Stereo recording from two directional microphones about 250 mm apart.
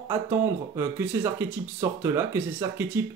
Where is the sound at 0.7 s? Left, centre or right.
Centre.